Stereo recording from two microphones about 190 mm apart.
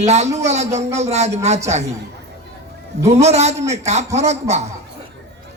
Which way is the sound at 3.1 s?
35° right (ahead or behind).